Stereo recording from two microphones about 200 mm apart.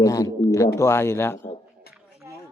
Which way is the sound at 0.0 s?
20° left (ahead or behind).